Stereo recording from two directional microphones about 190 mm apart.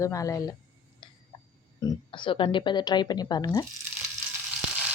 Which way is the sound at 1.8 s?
25° left (ahead or behind).